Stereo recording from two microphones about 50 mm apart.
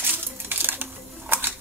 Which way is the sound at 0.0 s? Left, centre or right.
Right.